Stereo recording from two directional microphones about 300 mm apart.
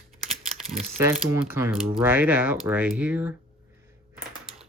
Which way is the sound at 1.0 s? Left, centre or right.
Centre.